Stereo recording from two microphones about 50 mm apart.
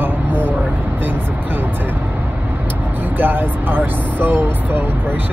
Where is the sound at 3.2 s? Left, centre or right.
Right.